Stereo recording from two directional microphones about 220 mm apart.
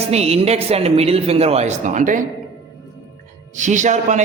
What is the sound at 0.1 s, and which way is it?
A woman's voice, 30° right (ahead or behind).